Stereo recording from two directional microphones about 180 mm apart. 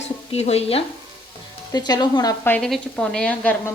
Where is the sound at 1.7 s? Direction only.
25° left (ahead or behind).